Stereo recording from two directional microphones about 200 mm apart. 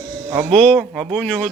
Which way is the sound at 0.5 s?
5° left (ahead or behind).